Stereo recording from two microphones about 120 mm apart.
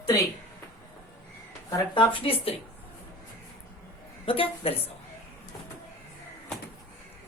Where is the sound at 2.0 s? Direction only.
50° left (ahead or behind).